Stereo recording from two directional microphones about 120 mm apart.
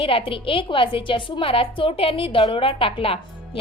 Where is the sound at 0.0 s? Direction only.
50° left (ahead or behind).